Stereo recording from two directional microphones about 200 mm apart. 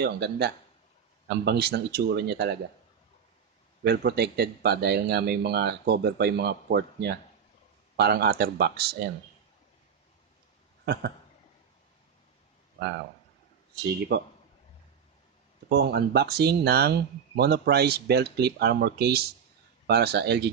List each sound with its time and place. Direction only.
0.0 s speech: 55° right (ahead or behind)
3.8 s speech: 50° right (ahead or behind)
10.9 s speech: 55° right (ahead or behind)
14.1 s speech: 55° right (ahead or behind)
15.8 s speech: 55° right (ahead or behind)